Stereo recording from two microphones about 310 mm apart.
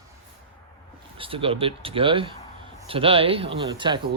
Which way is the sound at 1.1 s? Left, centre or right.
Centre.